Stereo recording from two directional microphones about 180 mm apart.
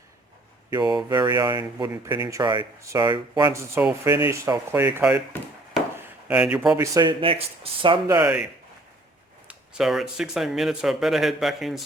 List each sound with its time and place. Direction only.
0.7 s speech: 25° right (ahead or behind)
6.0 s a sound: 5° right (ahead or behind)
6.7 s speech: 20° right (ahead or behind)
9.5 s speech: 5° right (ahead or behind)